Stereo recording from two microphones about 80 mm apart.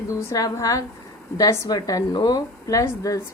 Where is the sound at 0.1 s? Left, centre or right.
Left.